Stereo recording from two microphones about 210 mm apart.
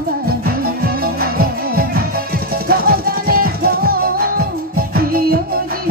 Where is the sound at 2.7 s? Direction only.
45° right (ahead or behind).